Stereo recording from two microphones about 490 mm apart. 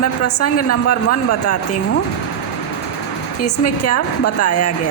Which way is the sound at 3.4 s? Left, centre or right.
Left.